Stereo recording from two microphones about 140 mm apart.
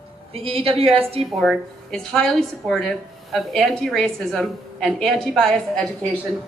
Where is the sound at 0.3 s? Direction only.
45° right (ahead or behind).